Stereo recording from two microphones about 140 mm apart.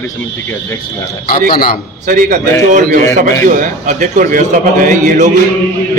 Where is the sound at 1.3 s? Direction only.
90° left.